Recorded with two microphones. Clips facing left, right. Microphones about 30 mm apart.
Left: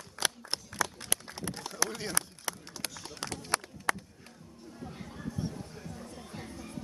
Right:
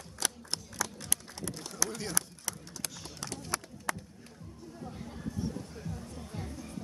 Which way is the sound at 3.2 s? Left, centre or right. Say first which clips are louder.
Left 2 dB; left.